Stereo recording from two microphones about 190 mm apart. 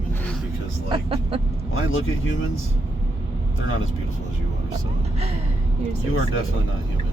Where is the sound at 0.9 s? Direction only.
30° right (ahead or behind).